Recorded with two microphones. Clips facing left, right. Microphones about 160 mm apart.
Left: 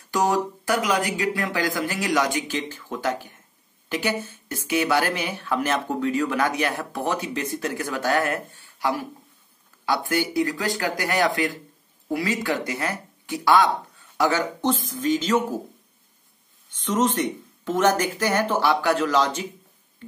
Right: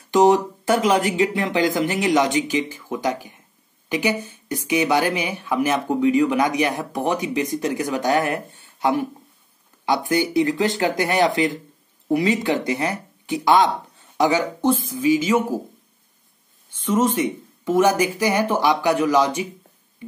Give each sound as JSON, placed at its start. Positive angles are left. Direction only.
{"t": 0.1, "sound": "speech", "side_deg": -20}
{"t": 16.7, "sound": "speech", "side_deg": -10}
{"t": 20.0, "sound": "a sound", "side_deg": -10}